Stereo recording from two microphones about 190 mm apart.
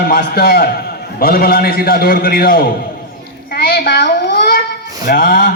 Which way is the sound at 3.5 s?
55° left (ahead or behind).